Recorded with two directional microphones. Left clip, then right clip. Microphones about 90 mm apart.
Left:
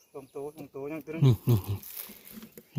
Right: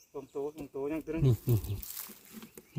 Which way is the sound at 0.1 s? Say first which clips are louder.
Right 2 dB; 20° left (ahead or behind).